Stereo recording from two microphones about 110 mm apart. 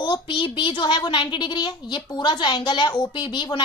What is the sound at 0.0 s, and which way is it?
A woman's voice, 45° left (ahead or behind).